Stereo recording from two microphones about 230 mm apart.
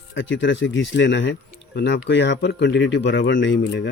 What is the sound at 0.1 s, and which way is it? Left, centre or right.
Speech, left.